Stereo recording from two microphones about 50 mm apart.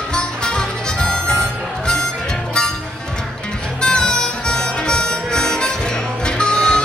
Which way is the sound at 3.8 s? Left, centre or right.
Centre.